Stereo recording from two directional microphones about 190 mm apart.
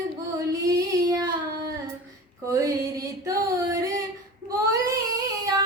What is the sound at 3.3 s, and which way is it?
Female singing, 15° right (ahead or behind).